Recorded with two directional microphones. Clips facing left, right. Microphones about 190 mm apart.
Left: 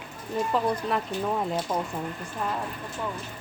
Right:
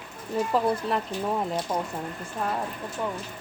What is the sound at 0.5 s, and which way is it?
A woman's voice, 5° right (ahead or behind).